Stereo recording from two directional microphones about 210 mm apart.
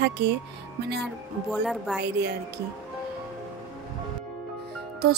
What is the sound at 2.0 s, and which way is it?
Speech, 55° right (ahead or behind).